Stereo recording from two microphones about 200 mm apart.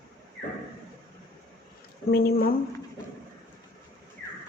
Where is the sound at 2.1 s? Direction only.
50° left (ahead or behind).